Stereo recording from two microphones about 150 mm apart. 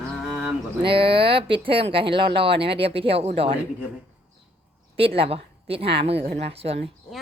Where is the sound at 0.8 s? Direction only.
35° right (ahead or behind).